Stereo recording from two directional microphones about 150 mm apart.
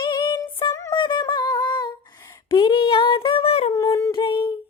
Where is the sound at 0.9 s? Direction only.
30° left (ahead or behind).